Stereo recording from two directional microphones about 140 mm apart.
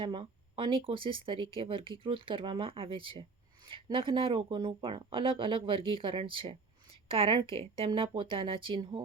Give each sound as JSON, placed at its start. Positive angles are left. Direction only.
{"t": 0.0, "sound": "speech", "side_deg": -35}